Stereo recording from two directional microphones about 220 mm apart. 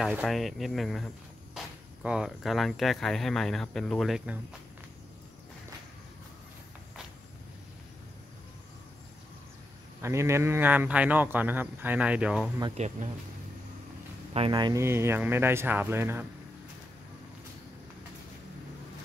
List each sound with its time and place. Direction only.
0.0 s speech: 5° right (ahead or behind)
10.0 s speech: 10° right (ahead or behind)
12.7 s speech: 30° right (ahead or behind)
14.3 s speech: 20° right (ahead or behind)